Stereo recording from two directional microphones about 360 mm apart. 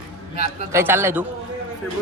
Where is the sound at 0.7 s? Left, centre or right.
Centre.